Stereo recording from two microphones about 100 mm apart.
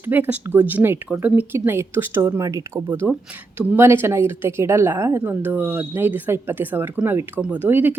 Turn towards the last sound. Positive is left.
turn(degrees=-20)  # may be behind; listen again after turning